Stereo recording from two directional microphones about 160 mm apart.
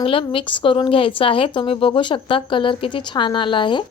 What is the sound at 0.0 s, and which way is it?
A woman's voice, 35° left (ahead or behind).